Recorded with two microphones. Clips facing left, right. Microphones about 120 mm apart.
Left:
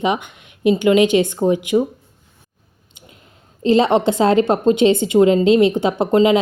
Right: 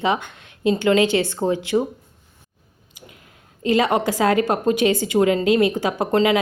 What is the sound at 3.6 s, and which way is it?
A woman's voice, 25° left (ahead or behind).